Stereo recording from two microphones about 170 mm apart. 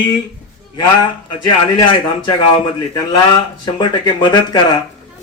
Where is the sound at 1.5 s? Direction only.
25° left (ahead or behind).